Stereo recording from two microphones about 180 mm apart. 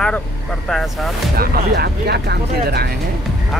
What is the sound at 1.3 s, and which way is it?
Speech, 55° right (ahead or behind).